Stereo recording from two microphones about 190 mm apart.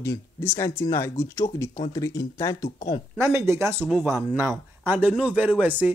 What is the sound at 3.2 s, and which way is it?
A man's voice, 15° right (ahead or behind).